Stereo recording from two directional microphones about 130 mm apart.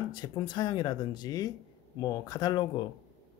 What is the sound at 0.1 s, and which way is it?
Speech, 35° left (ahead or behind).